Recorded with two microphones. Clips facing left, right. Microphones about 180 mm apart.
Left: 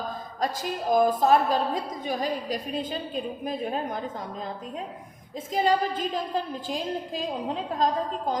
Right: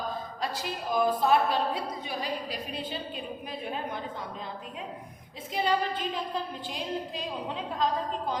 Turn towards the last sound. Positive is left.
turn(degrees=40)  # may be behind; listen again after turning